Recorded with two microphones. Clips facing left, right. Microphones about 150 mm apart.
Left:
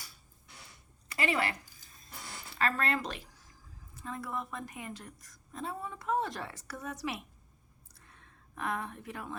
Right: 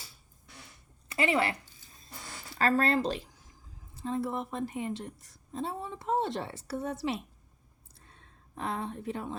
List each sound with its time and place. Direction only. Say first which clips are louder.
1.0 s a woman's voice: right 4 dB; 25° right (ahead or behind)
2.6 s a woman's voice: right 6 dB; 35° right (ahead or behind)
7.9 s a sound: right 2 dB; 30° right (ahead or behind)